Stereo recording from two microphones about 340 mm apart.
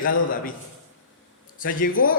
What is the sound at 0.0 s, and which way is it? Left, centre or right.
Speech, left.